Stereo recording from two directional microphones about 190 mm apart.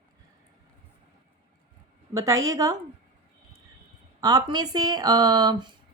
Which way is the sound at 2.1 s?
15° right (ahead or behind).